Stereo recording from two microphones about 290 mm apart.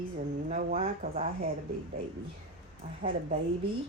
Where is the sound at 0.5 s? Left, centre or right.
Right.